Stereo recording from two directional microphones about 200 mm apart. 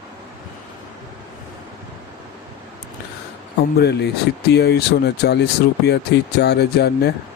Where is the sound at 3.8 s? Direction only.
55° left (ahead or behind).